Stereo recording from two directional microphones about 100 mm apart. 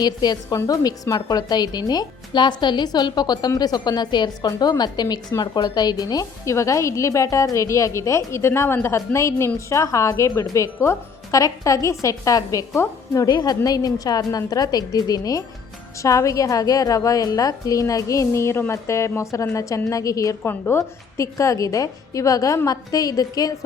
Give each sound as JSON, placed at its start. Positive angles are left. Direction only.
{"t": 0.0, "sound": "a woman's voice", "side_deg": 45}